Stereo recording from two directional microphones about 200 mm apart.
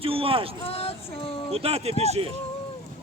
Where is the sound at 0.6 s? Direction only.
30° left (ahead or behind).